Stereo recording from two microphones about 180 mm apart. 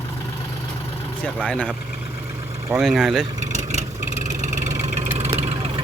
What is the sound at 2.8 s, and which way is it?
Speech, centre (ahead or behind).